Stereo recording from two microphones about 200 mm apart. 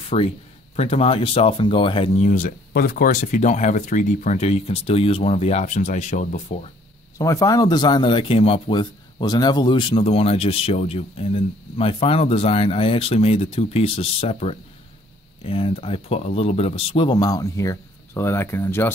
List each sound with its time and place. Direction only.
0.1 s speech: 35° left (ahead or behind)
7.2 s speech: 15° left (ahead or behind)